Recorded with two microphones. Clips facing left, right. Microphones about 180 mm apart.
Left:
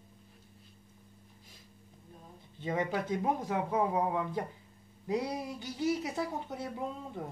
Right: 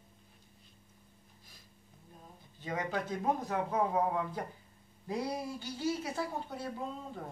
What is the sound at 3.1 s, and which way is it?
Speech, 15° left (ahead or behind).